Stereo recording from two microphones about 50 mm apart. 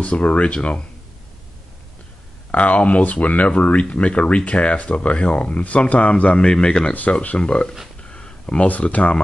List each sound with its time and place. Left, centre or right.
0.0 s speech: left
2.5 s speech: left
6.3 s a man's voice: centre
6.9 s speech: left
8.1 s a sound: centre
8.6 s speech: left